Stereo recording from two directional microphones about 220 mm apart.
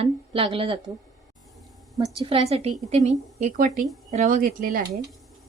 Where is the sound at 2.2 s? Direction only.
25° right (ahead or behind).